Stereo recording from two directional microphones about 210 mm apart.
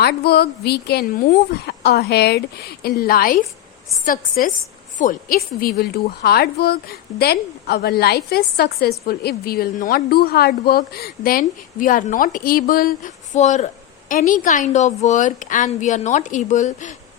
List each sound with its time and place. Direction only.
0.0 s a woman's voice: 50° left (ahead or behind)